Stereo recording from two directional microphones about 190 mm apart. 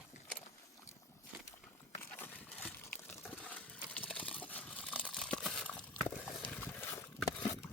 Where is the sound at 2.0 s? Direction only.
10° left (ahead or behind).